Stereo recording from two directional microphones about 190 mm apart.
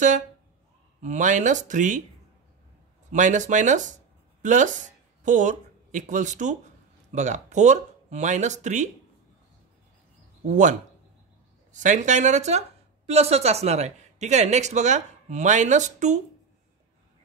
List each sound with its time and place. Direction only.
1.0 s a woman's voice: 40° right (ahead or behind)
3.1 s a woman's voice: 40° right (ahead or behind)
10.4 s a woman's voice: 40° right (ahead or behind)